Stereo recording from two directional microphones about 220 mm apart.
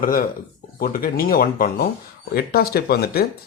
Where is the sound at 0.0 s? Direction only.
40° left (ahead or behind).